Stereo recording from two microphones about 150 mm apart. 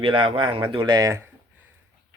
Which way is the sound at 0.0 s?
35° right (ahead or behind).